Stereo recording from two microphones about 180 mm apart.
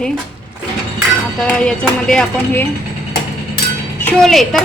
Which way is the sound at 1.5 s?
5° left (ahead or behind).